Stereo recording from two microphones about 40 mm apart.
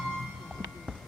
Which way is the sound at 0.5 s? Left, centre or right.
Centre.